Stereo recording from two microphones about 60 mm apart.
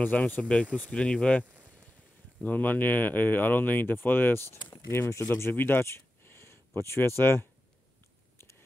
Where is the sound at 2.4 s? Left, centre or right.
Left.